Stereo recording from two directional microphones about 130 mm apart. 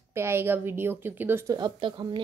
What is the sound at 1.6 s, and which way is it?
Speech, 40° right (ahead or behind).